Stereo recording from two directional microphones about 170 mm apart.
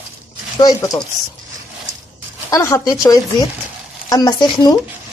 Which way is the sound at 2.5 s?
20° left (ahead or behind).